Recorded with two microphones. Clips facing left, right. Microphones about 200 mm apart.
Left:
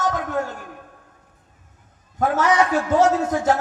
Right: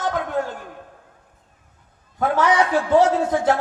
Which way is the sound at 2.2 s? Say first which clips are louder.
Even; 45° left (ahead or behind).